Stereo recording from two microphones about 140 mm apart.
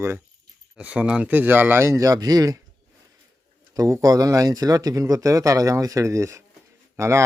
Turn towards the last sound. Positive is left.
turn(degrees=-20)  # may be behind; listen again after turning